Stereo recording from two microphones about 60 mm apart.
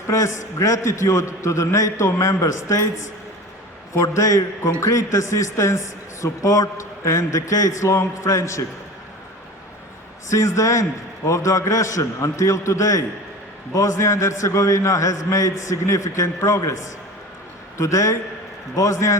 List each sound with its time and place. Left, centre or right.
0.1 s a man's voice: left
4.0 s a man's voice: left
10.3 s a man's voice: left